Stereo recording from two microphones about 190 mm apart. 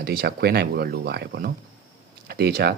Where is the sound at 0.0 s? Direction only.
55° right (ahead or behind).